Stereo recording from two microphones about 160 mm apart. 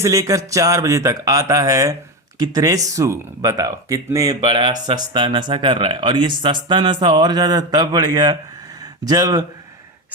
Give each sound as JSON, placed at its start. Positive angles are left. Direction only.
{"t": 0.0, "sound": "speech", "side_deg": -20}